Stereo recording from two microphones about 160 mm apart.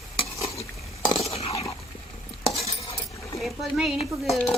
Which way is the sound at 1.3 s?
40° left (ahead or behind).